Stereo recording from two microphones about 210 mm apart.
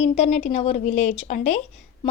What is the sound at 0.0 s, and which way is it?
Speech, 30° left (ahead or behind).